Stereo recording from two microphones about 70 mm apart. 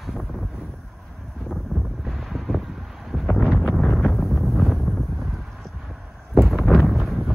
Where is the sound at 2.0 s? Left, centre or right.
Centre.